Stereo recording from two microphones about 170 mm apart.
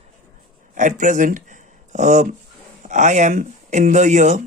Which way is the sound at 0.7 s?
50° right (ahead or behind).